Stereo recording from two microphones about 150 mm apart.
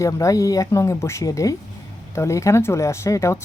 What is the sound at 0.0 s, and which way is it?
Speech, 20° left (ahead or behind).